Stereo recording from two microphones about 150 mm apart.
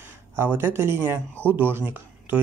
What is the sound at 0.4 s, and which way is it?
Speech, 15° right (ahead or behind).